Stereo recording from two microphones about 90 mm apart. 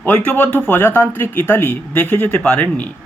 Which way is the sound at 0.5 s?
20° left (ahead or behind).